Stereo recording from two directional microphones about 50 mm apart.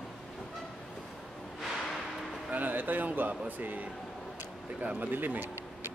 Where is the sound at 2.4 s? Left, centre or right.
Right.